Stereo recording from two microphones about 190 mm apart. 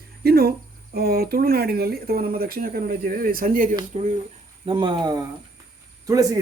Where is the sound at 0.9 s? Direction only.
55° right (ahead or behind).